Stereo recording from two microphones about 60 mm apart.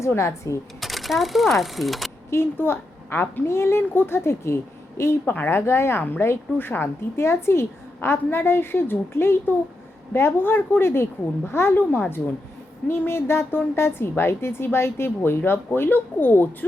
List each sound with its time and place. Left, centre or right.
0.2 s a woman's voice: left
0.8 s speech: centre
2.3 s a woman's voice: left
5.2 s speech: left
5.5 s a woman's voice: left
6.0 s a woman's voice: left